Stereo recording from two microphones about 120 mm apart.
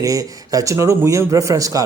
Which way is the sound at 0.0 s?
30° right (ahead or behind).